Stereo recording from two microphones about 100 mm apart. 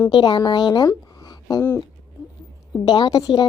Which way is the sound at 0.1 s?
50° left (ahead or behind).